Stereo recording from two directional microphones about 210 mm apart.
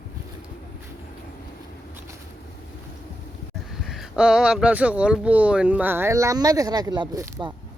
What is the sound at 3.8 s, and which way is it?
Speech, centre (ahead or behind).